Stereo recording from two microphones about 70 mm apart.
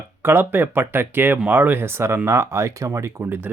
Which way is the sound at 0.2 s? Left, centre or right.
Right.